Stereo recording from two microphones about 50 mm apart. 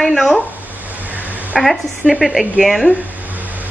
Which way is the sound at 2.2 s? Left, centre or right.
Centre.